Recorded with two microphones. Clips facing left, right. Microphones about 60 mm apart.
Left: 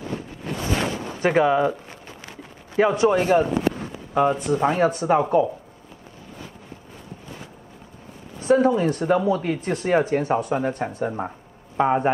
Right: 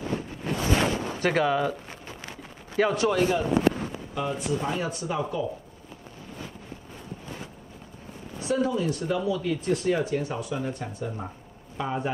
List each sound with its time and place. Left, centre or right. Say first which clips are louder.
1.2 s speech: left 6 dB; centre
3.2 s speech: left 4 dB; left
8.5 s speech: left 8 dB; left